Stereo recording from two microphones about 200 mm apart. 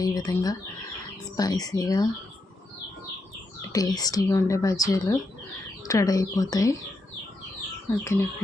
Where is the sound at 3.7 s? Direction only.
20° left (ahead or behind).